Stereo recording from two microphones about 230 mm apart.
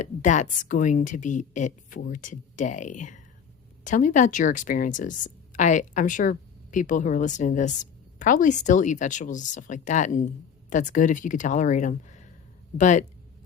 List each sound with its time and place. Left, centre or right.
0.0 s a woman's voice: left